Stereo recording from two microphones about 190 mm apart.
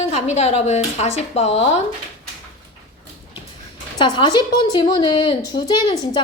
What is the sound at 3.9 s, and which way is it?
A woman's voice, 25° left (ahead or behind).